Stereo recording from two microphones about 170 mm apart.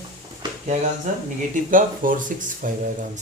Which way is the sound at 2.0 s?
50° right (ahead or behind).